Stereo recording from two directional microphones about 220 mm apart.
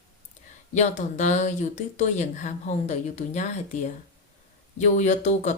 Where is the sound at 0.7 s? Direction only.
35° left (ahead or behind).